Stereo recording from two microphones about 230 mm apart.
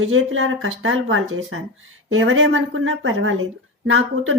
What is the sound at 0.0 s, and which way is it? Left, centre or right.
Speech, right.